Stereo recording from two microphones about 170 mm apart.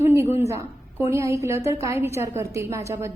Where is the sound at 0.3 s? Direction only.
15° right (ahead or behind).